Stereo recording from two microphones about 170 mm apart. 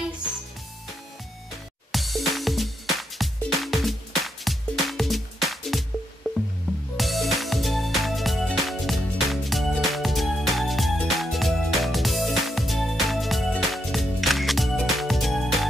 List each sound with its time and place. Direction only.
1.9 s music: centre (ahead or behind)